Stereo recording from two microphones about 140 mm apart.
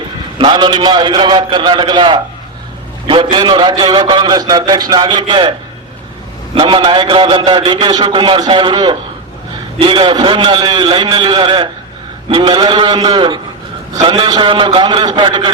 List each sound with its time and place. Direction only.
0.3 s a man's voice: 35° right (ahead or behind)